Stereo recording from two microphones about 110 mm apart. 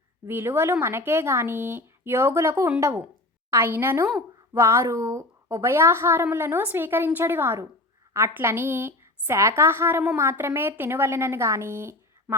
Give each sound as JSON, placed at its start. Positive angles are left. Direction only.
{"t": 0.3, "sound": "a woman's voice", "side_deg": -20}